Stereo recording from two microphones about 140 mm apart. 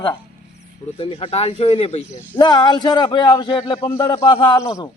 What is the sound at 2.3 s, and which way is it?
A man's voice, 30° left (ahead or behind).